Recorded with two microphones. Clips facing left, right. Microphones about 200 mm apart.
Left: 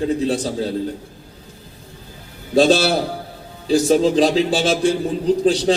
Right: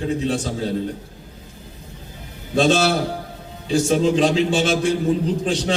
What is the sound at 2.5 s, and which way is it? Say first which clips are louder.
A man's voice: left 3 dB; 35° left (ahead or behind).